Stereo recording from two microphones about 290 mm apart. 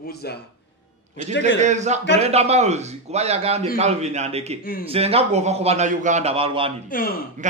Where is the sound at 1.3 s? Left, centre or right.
Left.